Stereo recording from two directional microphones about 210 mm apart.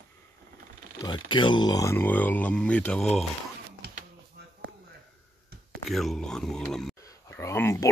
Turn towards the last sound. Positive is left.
turn(degrees=10)  # may be behind; listen again after turning